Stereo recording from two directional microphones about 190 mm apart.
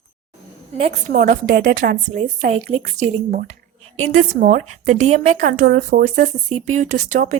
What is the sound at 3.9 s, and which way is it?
Speech, 90° right.